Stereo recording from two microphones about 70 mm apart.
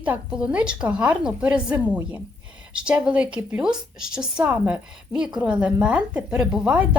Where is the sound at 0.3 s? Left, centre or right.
Centre.